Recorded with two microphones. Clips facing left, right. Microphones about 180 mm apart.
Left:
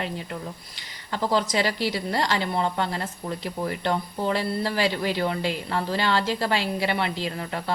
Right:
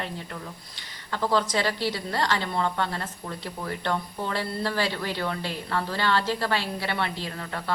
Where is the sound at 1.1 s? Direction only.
15° left (ahead or behind).